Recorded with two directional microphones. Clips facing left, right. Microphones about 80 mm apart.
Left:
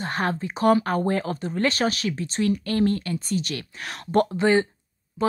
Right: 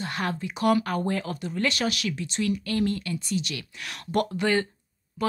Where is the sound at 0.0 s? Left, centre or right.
Left.